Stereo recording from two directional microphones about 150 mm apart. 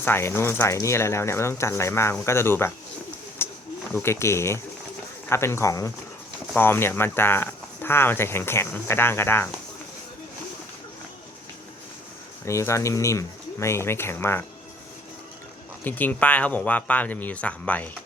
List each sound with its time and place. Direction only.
0.0 s speech: 15° left (ahead or behind)
3.4 s a sound: 15° left (ahead or behind)
3.9 s speech: 15° left (ahead or behind)
12.5 s speech: 20° left (ahead or behind)
15.8 s speech: 10° left (ahead or behind)